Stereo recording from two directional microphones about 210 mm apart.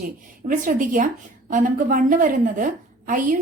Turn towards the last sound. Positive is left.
turn(degrees=-40)  # may be behind; listen again after turning